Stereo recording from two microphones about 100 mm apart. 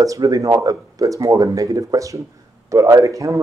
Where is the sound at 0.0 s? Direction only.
35° right (ahead or behind).